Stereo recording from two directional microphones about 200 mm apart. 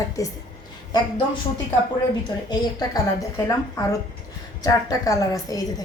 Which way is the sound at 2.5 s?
20° left (ahead or behind).